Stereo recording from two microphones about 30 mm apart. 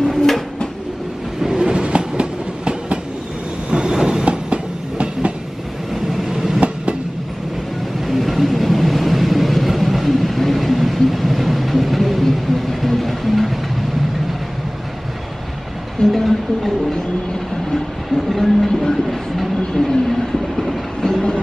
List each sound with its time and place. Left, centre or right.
0.0 s a sound: centre
1.4 s train: centre
1.7 s train: right
4.2 s train: right
6.2 s train: centre
8.0 s vehicle: centre
12.8 s music: centre
16.1 s a sound: centre
17.7 s train: centre
19.9 s vehicle: centre